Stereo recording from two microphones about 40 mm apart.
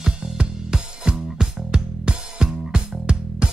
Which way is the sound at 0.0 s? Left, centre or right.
Right.